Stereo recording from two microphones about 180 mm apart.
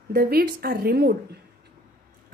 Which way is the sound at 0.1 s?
60° right (ahead or behind).